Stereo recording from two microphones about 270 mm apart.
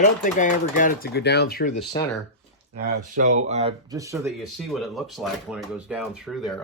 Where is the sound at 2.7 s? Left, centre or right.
Right.